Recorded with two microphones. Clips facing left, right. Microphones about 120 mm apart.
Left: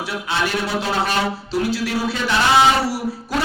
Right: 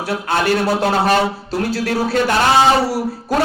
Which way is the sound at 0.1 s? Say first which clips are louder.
Right 7 dB; 50° right (ahead or behind).